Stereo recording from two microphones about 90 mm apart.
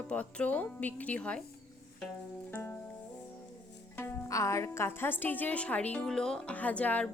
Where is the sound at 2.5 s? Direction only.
20° left (ahead or behind).